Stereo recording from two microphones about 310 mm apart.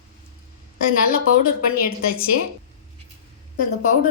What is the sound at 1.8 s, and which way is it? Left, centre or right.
Speech, left.